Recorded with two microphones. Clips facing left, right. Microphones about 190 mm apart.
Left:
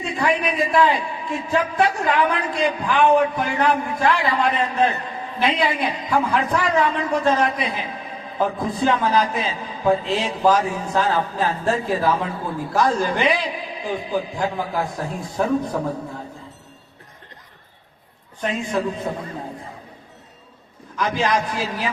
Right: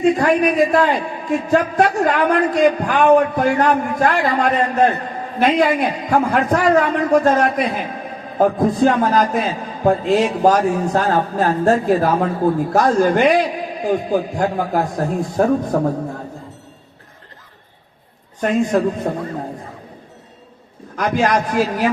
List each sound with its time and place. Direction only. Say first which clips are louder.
0.0 s a man's voice: right 8 dB; 45° right (ahead or behind)
18.3 s a man's voice: right 7 dB; 45° right (ahead or behind)
20.9 s a man's voice: right 4 dB; 50° right (ahead or behind)